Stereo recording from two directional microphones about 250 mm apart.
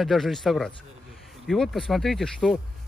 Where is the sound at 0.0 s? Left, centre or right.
Centre.